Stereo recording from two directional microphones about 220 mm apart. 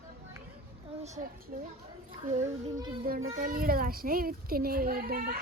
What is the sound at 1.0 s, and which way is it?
A child's voice, 30° right (ahead or behind).